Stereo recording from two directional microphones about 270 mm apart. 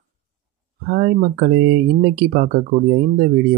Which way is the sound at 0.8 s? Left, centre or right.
Right.